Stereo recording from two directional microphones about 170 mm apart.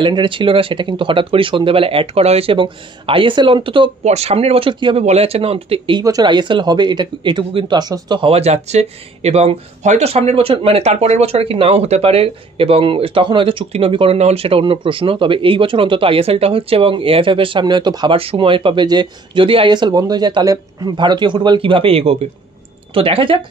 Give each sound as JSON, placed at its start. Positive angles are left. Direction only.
{"t": 0.0, "sound": "speech", "side_deg": -30}
{"t": 4.0, "sound": "speech", "side_deg": -40}